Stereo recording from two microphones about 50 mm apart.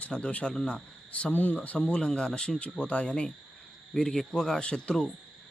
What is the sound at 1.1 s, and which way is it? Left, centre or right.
Speech, left.